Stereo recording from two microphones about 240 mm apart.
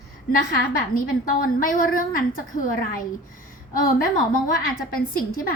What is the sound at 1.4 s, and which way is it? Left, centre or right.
A woman's voice, left.